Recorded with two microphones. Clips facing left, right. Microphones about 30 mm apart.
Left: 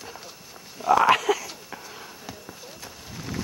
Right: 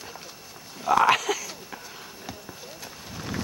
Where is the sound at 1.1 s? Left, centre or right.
Right.